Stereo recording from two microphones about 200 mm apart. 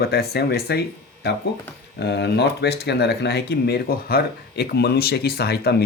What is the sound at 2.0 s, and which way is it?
Speech, 55° left (ahead or behind).